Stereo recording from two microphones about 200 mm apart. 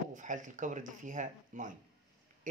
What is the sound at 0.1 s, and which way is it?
Speech, 40° right (ahead or behind).